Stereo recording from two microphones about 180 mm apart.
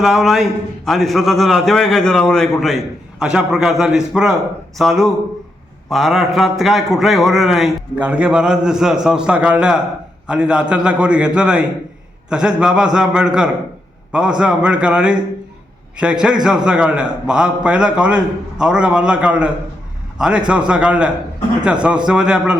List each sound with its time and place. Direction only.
0.0 s a man's voice: centre (ahead or behind)